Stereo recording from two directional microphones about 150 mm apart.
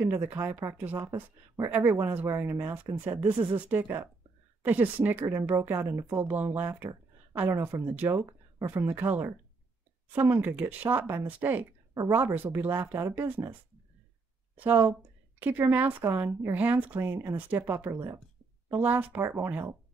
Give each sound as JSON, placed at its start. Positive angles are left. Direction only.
{"t": 0.0, "sound": "a woman's voice", "side_deg": -15}
{"t": 3.3, "sound": "speech", "side_deg": -35}
{"t": 3.5, "sound": "a woman's voice", "side_deg": -10}
{"t": 14.6, "sound": "a woman's voice", "side_deg": -10}